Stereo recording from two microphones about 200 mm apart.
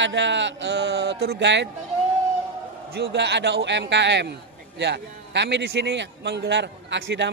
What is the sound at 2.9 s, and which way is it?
A man's voice, 55° right (ahead or behind).